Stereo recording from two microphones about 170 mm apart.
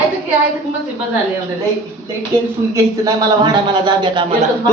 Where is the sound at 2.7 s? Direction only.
20° right (ahead or behind).